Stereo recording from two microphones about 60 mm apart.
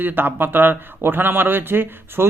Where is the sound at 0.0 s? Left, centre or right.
Right.